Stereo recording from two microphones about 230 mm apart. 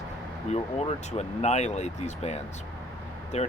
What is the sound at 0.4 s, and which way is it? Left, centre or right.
Speech, left.